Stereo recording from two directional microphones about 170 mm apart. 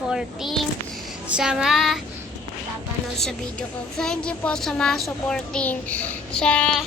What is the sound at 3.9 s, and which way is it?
A child's voice, 5° left (ahead or behind).